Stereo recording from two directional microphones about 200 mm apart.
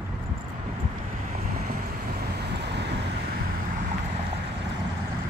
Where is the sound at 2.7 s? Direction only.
55° right (ahead or behind).